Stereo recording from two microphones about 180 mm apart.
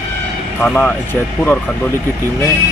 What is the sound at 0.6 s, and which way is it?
Speech, 5° left (ahead or behind).